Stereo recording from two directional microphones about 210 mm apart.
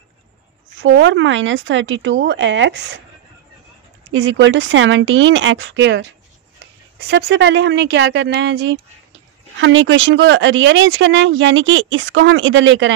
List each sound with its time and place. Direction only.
0.8 s speech: 60° right (ahead or behind)
4.1 s speech: 65° right (ahead or behind)